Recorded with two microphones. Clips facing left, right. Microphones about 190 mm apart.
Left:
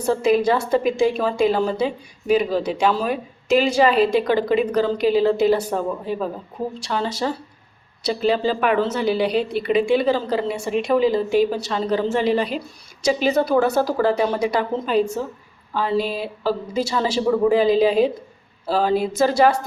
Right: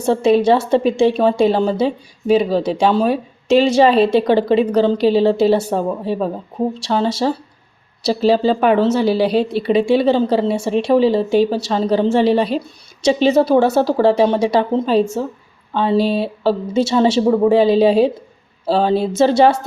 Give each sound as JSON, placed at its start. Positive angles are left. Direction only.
{"t": 0.0, "sound": "a woman's voice", "side_deg": -30}